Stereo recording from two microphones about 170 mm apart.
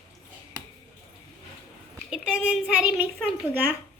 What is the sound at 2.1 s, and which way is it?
Child singing, 5° right (ahead or behind).